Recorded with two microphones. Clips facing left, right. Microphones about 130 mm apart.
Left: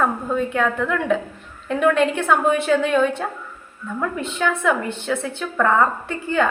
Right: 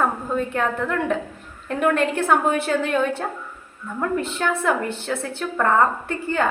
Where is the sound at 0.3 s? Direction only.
40° right (ahead or behind).